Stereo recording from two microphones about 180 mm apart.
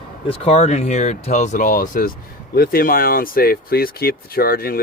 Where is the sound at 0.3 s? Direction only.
35° left (ahead or behind).